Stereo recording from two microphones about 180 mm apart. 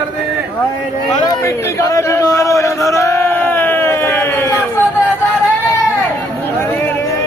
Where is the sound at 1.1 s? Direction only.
20° left (ahead or behind).